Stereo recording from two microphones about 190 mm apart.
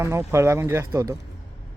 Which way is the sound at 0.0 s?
15° right (ahead or behind).